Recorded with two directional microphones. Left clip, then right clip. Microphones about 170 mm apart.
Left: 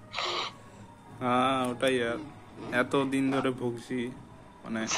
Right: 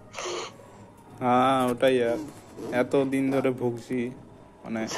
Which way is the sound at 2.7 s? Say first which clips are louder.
Right 3 dB; centre (ahead or behind).